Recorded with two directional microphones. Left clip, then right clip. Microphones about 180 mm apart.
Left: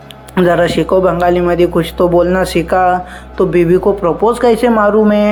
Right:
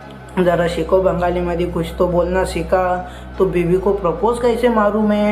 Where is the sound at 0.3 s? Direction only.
40° left (ahead or behind).